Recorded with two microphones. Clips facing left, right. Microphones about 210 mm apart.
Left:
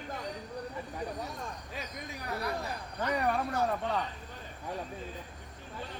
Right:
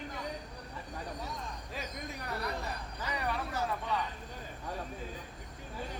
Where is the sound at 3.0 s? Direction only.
55° left (ahead or behind).